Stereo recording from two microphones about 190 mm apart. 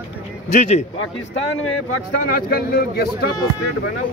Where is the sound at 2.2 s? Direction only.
55° left (ahead or behind).